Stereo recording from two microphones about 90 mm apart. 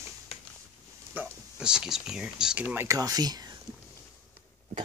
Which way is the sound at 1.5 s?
10° right (ahead or behind).